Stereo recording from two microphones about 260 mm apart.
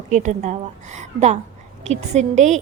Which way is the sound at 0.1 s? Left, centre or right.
Right.